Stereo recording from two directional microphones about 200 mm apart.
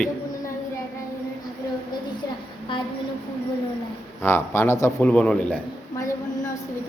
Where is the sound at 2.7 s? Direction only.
25° left (ahead or behind).